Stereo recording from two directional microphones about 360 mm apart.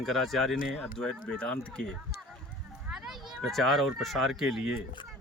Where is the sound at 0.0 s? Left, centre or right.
Centre.